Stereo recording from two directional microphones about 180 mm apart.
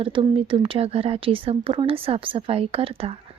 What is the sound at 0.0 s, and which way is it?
Speech, 30° right (ahead or behind).